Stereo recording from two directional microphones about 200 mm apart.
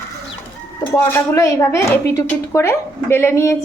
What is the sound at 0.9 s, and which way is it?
Speech, 15° left (ahead or behind).